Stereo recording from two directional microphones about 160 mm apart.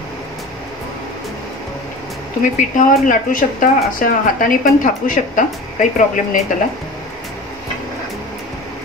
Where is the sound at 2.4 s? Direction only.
55° left (ahead or behind).